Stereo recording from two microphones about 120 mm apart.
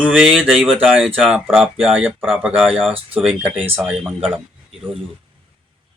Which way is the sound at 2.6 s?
Centre (ahead or behind).